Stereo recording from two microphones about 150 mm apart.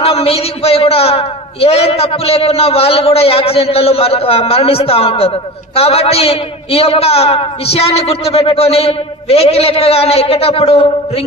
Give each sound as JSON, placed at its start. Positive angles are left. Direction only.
{"t": 0.0, "sound": "a woman's voice", "side_deg": 40}